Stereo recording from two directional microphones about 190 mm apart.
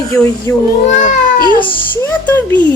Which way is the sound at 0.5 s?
15° left (ahead or behind).